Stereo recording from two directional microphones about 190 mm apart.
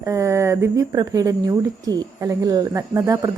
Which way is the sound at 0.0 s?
15° right (ahead or behind).